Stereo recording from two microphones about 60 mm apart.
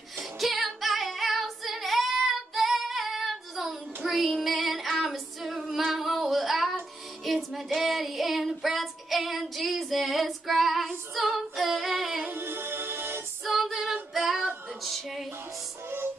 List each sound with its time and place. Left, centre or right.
0.2 s music: centre
5.9 s female singing: centre
7.2 s child singing: centre
11.2 s singing: centre
12.3 s music: right
13.4 s female singing: centre
14.8 s a sound: centre